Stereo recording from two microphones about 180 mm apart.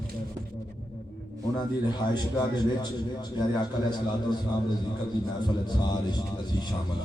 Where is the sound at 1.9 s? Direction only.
25° left (ahead or behind).